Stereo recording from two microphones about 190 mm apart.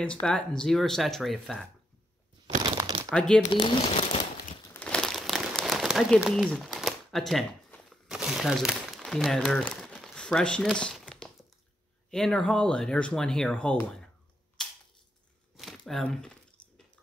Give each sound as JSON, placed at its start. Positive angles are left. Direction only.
{"t": 0.0, "sound": "speech", "side_deg": 5}
{"t": 2.6, "sound": "crumpling", "side_deg": -20}
{"t": 3.1, "sound": "speech", "side_deg": 5}
{"t": 3.5, "sound": "speech", "side_deg": 25}
{"t": 4.7, "sound": "crumpling", "side_deg": 5}
{"t": 12.1, "sound": "speech", "side_deg": 5}
{"t": 14.6, "sound": "a sound", "side_deg": 5}